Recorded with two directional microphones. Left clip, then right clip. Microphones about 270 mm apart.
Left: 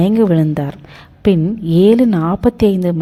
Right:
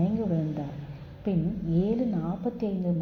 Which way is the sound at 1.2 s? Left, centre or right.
Left.